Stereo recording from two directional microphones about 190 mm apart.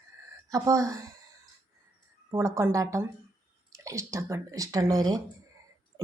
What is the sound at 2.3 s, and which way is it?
Speech, 15° right (ahead or behind).